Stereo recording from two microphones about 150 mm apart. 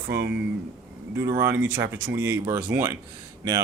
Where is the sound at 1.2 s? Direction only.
20° right (ahead or behind).